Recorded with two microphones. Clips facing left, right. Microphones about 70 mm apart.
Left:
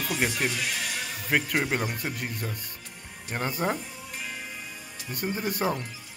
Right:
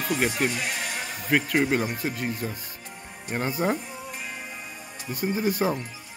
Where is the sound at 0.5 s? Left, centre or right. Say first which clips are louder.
Right 1 dB; right.